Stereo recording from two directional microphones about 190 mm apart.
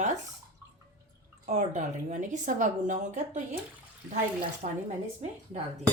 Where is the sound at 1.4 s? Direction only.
40° right (ahead or behind).